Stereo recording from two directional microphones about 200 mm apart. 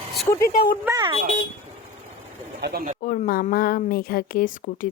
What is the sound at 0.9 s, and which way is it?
Speech, 20° right (ahead or behind).